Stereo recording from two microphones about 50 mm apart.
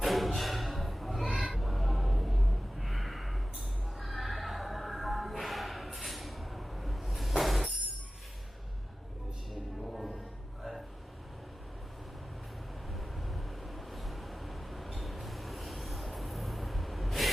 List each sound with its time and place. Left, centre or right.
0.0 s a sound: centre
1.4 s music: centre
3.9 s neigh: centre
9.5 s music: centre
10.6 s vehicle: centre
12.9 s vehicle: centre